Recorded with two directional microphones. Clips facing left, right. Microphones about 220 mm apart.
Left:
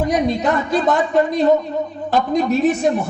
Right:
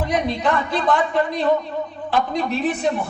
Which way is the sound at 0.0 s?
45° left (ahead or behind).